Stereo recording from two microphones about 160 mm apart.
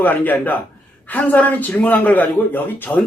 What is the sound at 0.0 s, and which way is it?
A man's voice, 10° left (ahead or behind).